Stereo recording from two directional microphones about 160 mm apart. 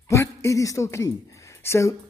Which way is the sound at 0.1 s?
15° left (ahead or behind).